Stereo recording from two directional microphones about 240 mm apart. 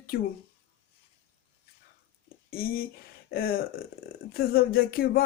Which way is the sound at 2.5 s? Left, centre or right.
Left.